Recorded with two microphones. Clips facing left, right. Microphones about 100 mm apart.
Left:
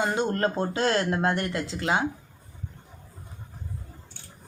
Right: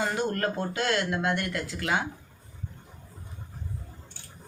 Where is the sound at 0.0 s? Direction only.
25° left (ahead or behind).